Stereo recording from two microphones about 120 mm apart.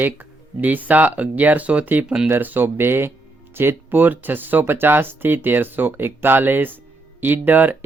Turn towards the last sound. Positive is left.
turn(degrees=-15)  # may be behind; listen again after turning